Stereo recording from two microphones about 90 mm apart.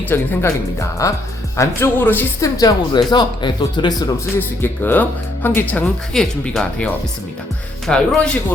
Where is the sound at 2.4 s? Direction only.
45° left (ahead or behind).